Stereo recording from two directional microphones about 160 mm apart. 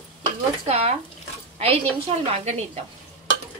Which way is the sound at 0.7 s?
40° right (ahead or behind).